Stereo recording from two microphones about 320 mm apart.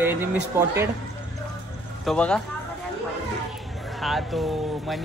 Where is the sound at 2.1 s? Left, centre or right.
Centre.